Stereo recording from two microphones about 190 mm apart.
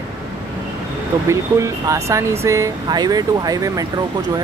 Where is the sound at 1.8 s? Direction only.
15° right (ahead or behind).